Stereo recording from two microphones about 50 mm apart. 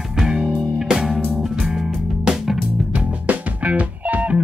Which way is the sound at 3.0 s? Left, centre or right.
Right.